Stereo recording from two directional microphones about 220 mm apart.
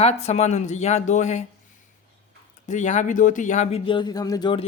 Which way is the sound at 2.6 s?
35° left (ahead or behind).